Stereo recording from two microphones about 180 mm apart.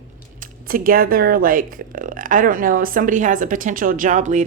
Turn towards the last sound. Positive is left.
turn(degrees=-45)  # may be behind; listen again after turning